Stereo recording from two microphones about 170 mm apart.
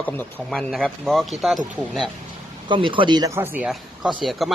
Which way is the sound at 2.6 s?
30° right (ahead or behind).